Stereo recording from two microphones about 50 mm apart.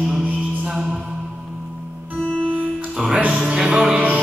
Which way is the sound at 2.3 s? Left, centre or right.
Right.